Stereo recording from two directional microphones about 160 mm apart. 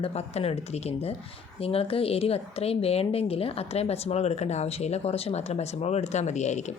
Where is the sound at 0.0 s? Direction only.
40° left (ahead or behind).